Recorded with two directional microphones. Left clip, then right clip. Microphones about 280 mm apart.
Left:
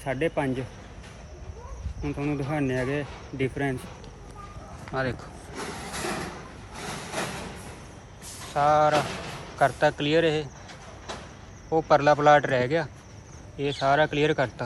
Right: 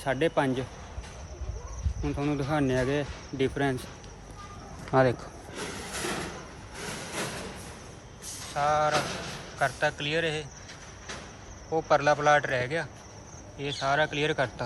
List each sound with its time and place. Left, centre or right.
0.0 s speech: centre
2.0 s speech: centre
4.9 s speech: right
5.5 s vehicle: centre
8.5 s speech: centre
8.9 s speech: left
9.6 s speech: centre
11.7 s speech: centre